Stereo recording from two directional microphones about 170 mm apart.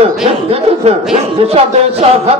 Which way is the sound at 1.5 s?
35° right (ahead or behind).